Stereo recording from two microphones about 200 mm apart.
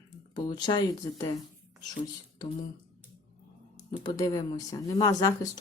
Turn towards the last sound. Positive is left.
turn(degrees=15)  # may be behind; listen again after turning